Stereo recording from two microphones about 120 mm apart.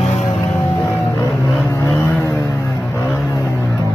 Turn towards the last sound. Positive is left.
turn(degrees=25)  # may be behind; listen again after turning